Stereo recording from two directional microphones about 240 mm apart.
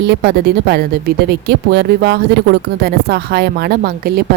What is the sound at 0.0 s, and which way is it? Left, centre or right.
A woman's voice, right.